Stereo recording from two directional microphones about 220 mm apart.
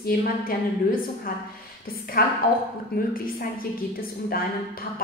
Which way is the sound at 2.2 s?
40° left (ahead or behind).